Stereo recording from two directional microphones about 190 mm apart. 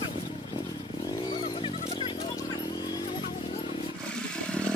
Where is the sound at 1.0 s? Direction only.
20° left (ahead or behind).